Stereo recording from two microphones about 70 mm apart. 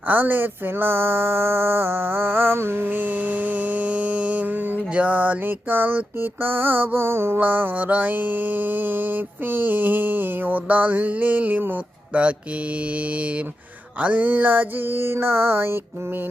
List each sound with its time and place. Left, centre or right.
0.1 s mantra: right
7.3 s mantra: right
14.0 s a sound: right